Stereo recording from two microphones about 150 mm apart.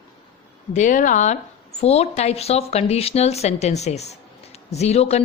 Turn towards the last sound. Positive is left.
turn(degrees=45)  # may be behind; listen again after turning